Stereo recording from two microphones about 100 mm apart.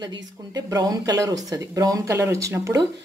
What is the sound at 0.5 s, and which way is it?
Speech, 35° right (ahead or behind).